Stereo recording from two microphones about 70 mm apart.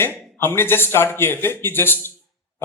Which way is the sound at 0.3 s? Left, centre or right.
Left.